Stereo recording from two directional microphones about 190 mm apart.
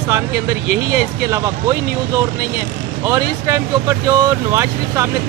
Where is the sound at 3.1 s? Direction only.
15° right (ahead or behind).